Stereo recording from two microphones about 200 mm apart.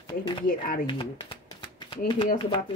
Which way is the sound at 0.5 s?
45° left (ahead or behind).